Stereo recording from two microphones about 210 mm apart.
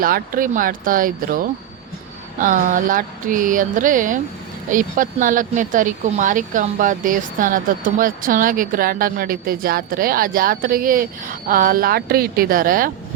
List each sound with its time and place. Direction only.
0.0 s speech: 40° right (ahead or behind)